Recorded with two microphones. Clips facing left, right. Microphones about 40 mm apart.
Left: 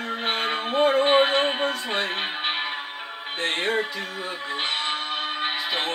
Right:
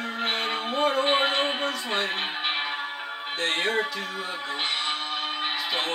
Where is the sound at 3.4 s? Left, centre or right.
Centre.